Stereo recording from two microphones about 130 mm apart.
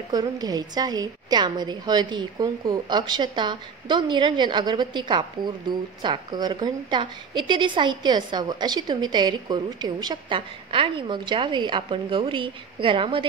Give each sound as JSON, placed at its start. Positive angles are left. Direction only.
{"t": 0.1, "sound": "a woman's voice", "side_deg": -30}